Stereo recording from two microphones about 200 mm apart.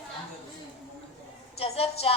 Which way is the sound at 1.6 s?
30° left (ahead or behind).